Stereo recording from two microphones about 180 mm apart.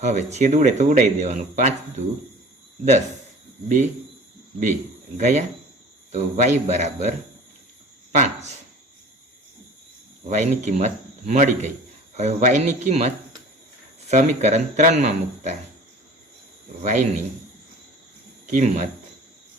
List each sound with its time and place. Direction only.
0.0 s speech: 40° right (ahead or behind)
4.6 s speech: 40° right (ahead or behind)
10.2 s speech: 40° right (ahead or behind)
16.8 s speech: 40° right (ahead or behind)
18.4 s speech: 40° right (ahead or behind)